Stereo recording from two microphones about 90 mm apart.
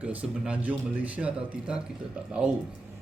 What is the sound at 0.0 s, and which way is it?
Speech, 15° right (ahead or behind).